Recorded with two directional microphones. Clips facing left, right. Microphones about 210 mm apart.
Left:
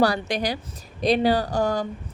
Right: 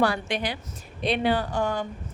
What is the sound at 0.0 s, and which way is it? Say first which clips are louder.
A woman's voice: left 3 dB; 40° left (ahead or behind).